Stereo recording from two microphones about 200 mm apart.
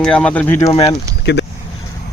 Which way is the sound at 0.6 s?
30° left (ahead or behind).